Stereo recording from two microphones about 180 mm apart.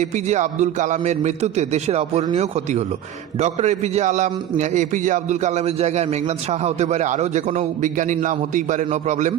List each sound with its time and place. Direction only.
0.0 s a man's voice: 40° right (ahead or behind)
3.3 s a man's voice: 40° right (ahead or behind)